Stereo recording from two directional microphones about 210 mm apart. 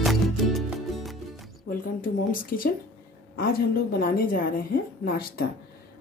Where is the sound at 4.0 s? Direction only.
45° left (ahead or behind).